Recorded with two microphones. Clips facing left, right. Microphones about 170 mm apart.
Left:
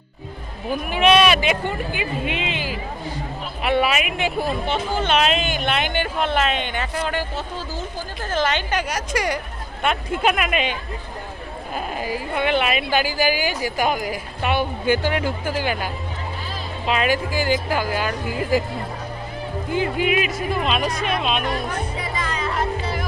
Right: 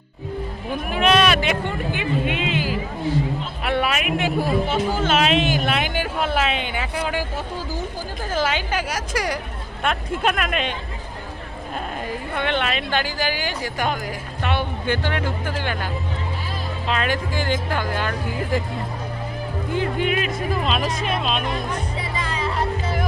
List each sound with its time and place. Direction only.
0.7 s speech: 5° left (ahead or behind)
3.6 s speech: centre (ahead or behind)
11.9 s a woman's voice: 5° left (ahead or behind)
19.7 s speech: 5° left (ahead or behind)
21.4 s music: 25° right (ahead or behind)